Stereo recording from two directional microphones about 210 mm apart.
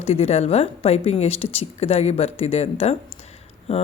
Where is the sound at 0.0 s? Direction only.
30° left (ahead or behind).